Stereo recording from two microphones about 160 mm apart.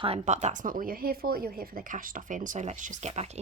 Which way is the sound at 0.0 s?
40° right (ahead or behind).